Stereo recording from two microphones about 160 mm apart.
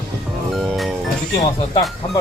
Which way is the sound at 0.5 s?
Centre (ahead or behind).